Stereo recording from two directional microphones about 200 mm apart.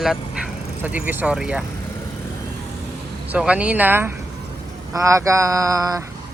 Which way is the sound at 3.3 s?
5° right (ahead or behind).